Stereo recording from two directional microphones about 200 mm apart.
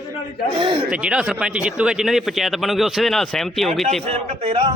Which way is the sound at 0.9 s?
5° right (ahead or behind).